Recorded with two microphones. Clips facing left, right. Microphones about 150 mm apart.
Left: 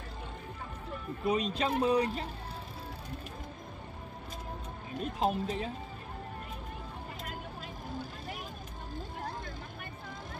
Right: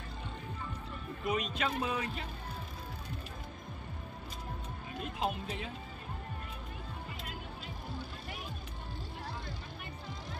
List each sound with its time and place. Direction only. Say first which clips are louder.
1.2 s speech: left 4 dB; 35° left (ahead or behind)
5.0 s speech: left 5 dB; 40° left (ahead or behind)